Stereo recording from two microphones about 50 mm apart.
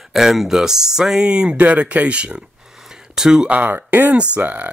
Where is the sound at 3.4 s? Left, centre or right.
Right.